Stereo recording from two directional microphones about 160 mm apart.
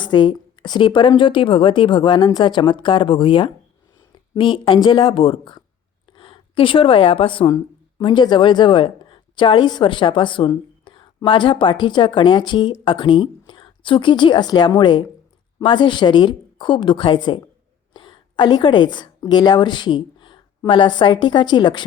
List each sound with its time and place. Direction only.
0.0 s a woman's voice: 30° left (ahead or behind)